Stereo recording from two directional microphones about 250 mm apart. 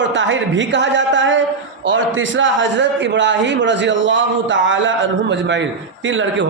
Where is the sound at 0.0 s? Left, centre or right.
Right.